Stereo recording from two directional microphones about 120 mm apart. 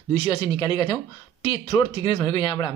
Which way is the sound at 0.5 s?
40° left (ahead or behind).